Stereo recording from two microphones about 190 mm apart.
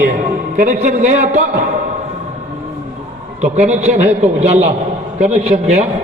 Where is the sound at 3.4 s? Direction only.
40° right (ahead or behind).